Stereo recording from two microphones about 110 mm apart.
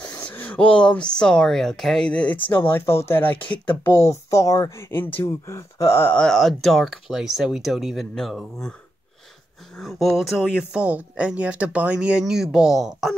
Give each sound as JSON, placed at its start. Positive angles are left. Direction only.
{"t": 0.1, "sound": "a sound", "side_deg": 15}
{"t": 1.2, "sound": "speech", "side_deg": 5}
{"t": 6.1, "sound": "speech", "side_deg": 5}
{"t": 9.8, "sound": "speech", "side_deg": 0}
{"t": 10.7, "sound": "speech", "side_deg": -10}